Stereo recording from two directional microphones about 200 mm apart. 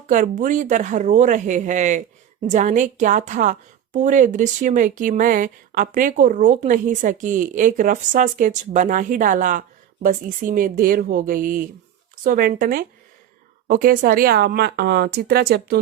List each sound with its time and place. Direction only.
0.1 s a woman's voice: 40° right (ahead or behind)